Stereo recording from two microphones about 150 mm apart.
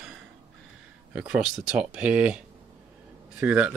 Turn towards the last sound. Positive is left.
turn(degrees=-10)  # may be behind; listen again after turning